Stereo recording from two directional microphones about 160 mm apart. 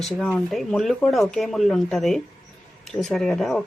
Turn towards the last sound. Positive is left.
turn(degrees=0)  # may be behind; listen again after turning